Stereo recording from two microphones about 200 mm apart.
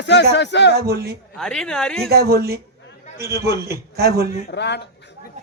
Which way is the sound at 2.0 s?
50° right (ahead or behind).